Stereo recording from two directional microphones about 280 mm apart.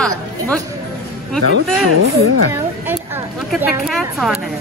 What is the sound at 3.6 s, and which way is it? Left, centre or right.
Speech, centre.